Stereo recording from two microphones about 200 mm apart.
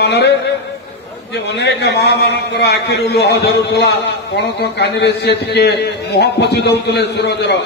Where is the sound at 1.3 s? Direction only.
60° left (ahead or behind).